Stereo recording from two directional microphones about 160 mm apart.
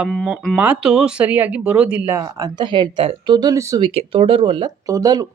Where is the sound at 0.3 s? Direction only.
5° right (ahead or behind).